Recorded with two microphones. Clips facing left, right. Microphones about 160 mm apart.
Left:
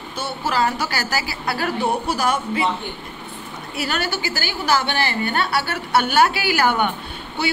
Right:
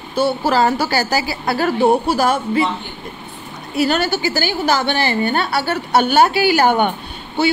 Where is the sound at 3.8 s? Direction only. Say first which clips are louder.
Right 6 dB; 25° right (ahead or behind).